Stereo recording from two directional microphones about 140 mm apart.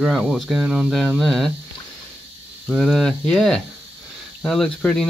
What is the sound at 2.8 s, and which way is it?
Speech, centre (ahead or behind).